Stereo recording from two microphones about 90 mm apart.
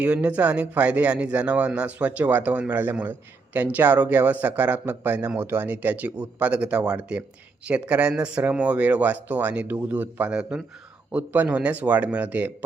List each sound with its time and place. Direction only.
0.0 s speech: 15° right (ahead or behind)